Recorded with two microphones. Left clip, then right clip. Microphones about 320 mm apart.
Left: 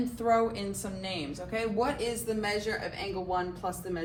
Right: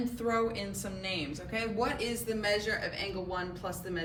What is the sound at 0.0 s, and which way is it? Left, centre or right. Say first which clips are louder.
A woman's voice: left 4 dB; left.